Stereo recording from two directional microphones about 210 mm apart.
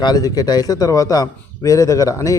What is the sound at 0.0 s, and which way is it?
A man's voice, 20° left (ahead or behind).